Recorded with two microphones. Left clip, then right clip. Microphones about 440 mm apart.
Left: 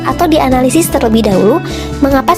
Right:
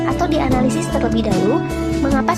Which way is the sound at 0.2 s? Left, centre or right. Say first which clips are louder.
Left 11 dB; centre.